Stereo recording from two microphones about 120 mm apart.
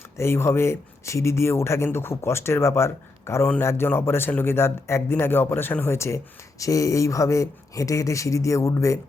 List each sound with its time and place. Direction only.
0.2 s speech: 20° left (ahead or behind)